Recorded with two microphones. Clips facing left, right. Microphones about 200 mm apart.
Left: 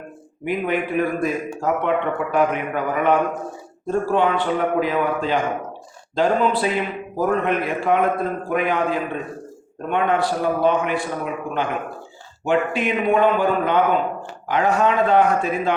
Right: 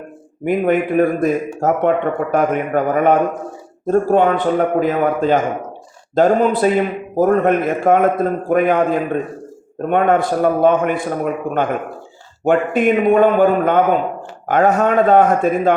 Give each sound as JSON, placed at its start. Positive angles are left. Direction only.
{"t": 0.4, "sound": "speech", "side_deg": -45}